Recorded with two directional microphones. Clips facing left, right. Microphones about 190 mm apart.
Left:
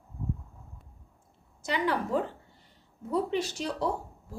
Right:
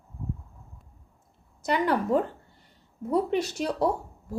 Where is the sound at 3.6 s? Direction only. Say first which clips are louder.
Right 5 dB; 50° right (ahead or behind).